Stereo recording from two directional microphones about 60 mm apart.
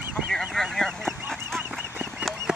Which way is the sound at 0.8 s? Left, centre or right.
Centre.